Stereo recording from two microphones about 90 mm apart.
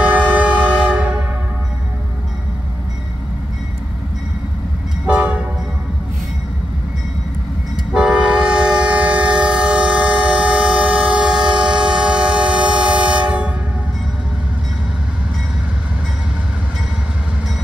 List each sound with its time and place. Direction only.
0.0 s train: 15° right (ahead or behind)
5.0 s train: 10° right (ahead or behind)
7.9 s train: 10° right (ahead or behind)